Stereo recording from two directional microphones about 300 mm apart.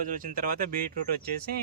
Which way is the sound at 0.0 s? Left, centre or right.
Right.